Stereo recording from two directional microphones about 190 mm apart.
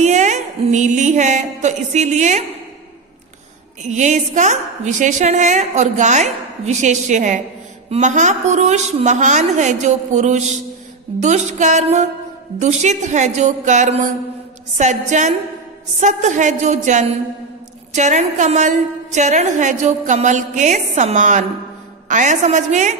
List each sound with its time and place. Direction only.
0.0 s a woman's voice: 40° right (ahead or behind)
3.8 s a woman's voice: 40° right (ahead or behind)